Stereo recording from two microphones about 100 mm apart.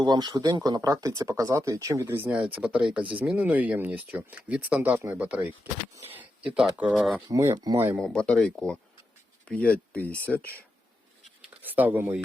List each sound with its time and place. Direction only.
0.0 s speech: 45° right (ahead or behind)
2.0 s speech: 20° right (ahead or behind); by 7.2 s 5° right (ahead or behind)
7.3 s speech: 30° right (ahead or behind)
7.9 s speech: 10° left (ahead or behind)
11.6 s speech: 20° right (ahead or behind)